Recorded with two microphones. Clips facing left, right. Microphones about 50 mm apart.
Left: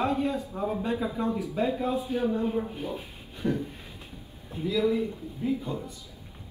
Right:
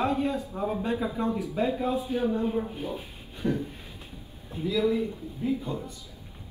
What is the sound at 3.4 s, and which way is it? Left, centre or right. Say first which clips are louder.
Speech: even; right.